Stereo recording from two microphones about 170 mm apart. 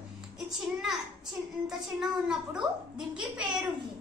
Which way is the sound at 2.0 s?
5° right (ahead or behind).